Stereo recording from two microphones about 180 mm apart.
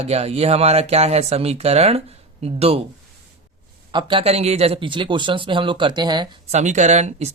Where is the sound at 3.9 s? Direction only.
30° right (ahead or behind).